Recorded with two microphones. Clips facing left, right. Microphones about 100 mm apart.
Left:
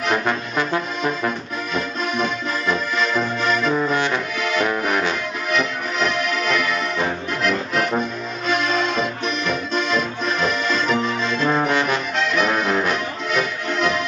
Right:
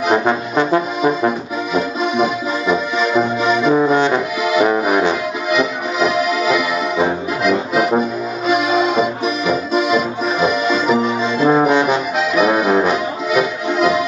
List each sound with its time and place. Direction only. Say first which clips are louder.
0.1 s music: right 6 dB; 15° right (ahead or behind)
3.7 s music: right 7 dB; 20° right (ahead or behind)
8.0 s accordion: right 6 dB; 5° right (ahead or behind)